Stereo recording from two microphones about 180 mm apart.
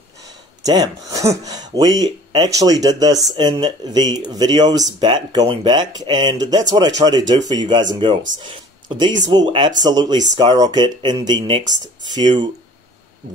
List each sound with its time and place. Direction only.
0.7 s speech: 20° right (ahead or behind)